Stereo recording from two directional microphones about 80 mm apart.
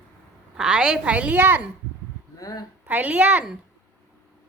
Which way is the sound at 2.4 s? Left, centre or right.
Left.